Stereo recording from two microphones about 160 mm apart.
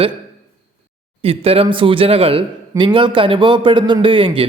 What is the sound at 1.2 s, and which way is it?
A man's voice, 35° right (ahead or behind).